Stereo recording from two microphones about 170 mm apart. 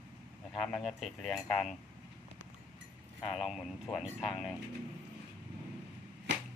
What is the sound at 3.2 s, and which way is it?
Speech, centre (ahead or behind).